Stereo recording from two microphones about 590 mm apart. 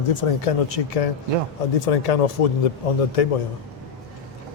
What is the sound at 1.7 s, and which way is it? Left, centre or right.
Speech, left.